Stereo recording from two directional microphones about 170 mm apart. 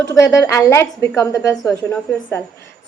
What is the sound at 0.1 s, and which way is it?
A woman's voice, 20° left (ahead or behind).